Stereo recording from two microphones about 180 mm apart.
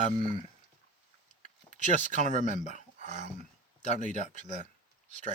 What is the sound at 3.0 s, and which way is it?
Speech, 40° right (ahead or behind).